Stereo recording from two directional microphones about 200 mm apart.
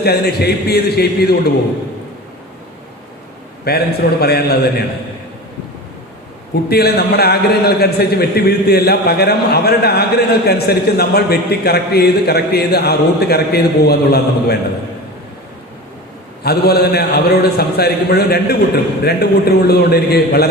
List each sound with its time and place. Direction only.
0.0 s a man's voice: 50° left (ahead or behind)
3.6 s a man's voice: 50° left (ahead or behind)
6.7 s a man's voice: 50° left (ahead or behind)
16.4 s a man's voice: 50° left (ahead or behind)